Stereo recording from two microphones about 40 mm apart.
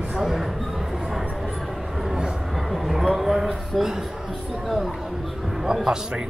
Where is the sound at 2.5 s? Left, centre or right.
Centre.